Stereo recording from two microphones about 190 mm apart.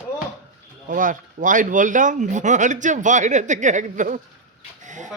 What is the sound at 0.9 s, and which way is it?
Speech, 45° right (ahead or behind).